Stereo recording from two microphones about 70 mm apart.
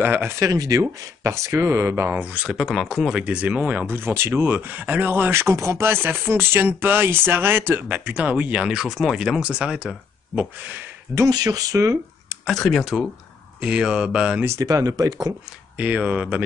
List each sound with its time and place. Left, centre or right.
0.0 s speech: right
0.4 s speech: right
1.5 s speech: right
2.3 s speech: centre; by 3.9 s right
3.9 s speech: right
7.9 s speech: centre
9.4 s speech: centre
11.2 s speech: right
12.5 s speech: centre
12.8 s speech: centre
14.6 s speech: right
15.8 s speech: right